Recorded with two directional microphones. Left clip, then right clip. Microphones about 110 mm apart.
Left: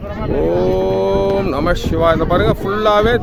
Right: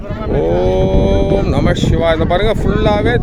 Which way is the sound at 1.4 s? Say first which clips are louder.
Right 1 dB; 5° left (ahead or behind).